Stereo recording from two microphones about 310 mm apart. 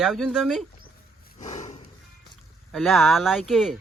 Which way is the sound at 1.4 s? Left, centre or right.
Left.